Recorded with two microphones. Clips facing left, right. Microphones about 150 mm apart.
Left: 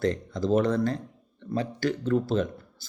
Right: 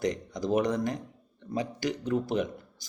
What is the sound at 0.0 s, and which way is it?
Speech, 15° right (ahead or behind).